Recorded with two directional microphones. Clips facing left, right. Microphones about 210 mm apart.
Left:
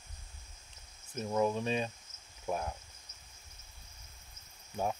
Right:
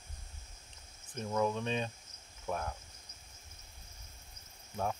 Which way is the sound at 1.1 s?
10° left (ahead or behind).